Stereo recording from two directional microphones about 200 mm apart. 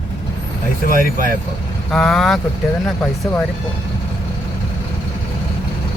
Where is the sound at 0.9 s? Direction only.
45° right (ahead or behind).